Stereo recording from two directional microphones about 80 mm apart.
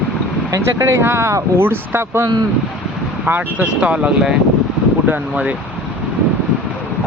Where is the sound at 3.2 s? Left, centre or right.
Right.